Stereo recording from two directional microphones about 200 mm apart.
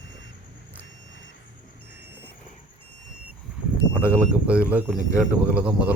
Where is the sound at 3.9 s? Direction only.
5° right (ahead or behind).